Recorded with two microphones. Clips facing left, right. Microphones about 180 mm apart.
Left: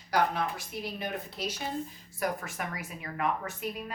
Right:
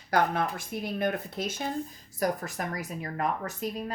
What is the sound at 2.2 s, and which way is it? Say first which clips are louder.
A woman's voice: right 3 dB; 40° right (ahead or behind).